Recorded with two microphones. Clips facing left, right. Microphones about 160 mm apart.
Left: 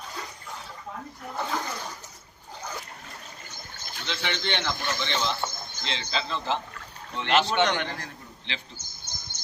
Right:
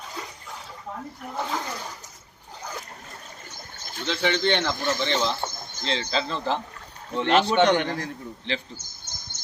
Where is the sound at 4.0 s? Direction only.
40° right (ahead or behind).